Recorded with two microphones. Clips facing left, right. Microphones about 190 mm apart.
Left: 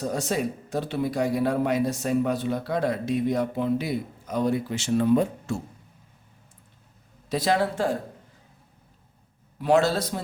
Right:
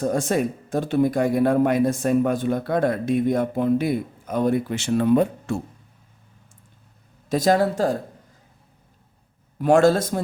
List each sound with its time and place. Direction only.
0.0 s speech: 50° right (ahead or behind)
7.3 s speech: 45° right (ahead or behind)
9.6 s speech: 50° right (ahead or behind)